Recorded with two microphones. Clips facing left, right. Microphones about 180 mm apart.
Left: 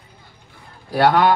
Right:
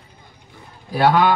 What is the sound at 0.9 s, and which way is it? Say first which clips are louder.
Speech: left 1 dB; 65° left (ahead or behind).